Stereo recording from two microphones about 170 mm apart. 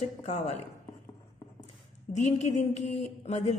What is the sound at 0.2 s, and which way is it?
Speech, 40° left (ahead or behind).